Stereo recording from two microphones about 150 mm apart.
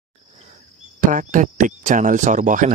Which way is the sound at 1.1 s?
60° right (ahead or behind).